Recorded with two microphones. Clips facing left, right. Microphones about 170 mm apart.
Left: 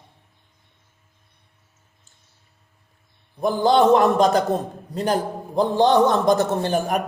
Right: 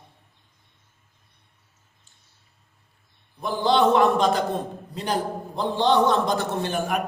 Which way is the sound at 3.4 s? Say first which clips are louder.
Left 4 dB; 45° left (ahead or behind).